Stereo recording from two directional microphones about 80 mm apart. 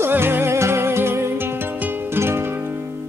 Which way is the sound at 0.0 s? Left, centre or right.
Right.